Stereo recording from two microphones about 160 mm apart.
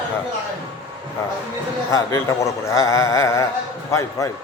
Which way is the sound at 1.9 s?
20° left (ahead or behind).